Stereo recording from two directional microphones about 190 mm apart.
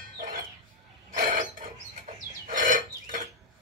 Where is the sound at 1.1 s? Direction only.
45° right (ahead or behind).